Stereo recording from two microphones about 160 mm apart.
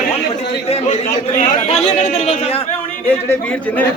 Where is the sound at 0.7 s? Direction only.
40° left (ahead or behind).